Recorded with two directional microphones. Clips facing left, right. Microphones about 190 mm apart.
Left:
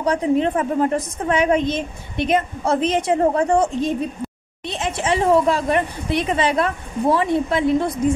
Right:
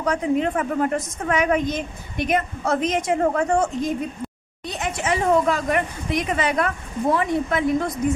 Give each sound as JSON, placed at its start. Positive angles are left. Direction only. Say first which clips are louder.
{"t": 0.0, "sound": "a woman's voice", "louder": "left 3 dB", "side_deg": 30}